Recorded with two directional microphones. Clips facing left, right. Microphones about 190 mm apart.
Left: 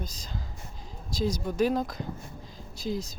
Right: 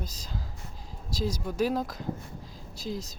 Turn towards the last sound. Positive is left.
turn(degrees=0)  # may be behind; listen again after turning